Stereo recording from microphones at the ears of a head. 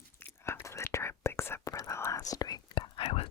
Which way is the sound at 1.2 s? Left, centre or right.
Left.